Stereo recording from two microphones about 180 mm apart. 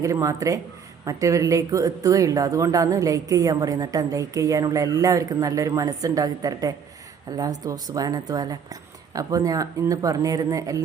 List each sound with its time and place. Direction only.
0.0 s speech: 15° right (ahead or behind)